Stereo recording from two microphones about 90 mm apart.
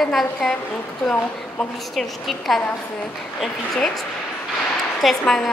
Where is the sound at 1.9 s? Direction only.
Centre (ahead or behind).